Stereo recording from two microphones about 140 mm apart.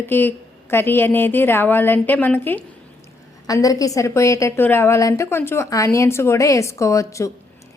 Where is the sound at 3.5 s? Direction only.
25° left (ahead or behind).